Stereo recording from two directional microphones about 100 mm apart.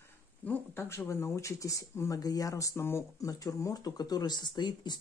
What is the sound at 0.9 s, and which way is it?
Speech, 30° left (ahead or behind).